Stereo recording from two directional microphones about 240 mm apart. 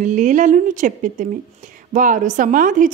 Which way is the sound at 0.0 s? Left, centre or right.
Right.